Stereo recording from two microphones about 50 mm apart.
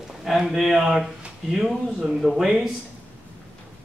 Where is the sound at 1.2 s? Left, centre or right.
Centre.